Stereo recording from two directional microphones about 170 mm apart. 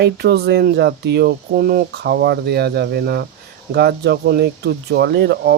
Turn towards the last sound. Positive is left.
turn(degrees=-85)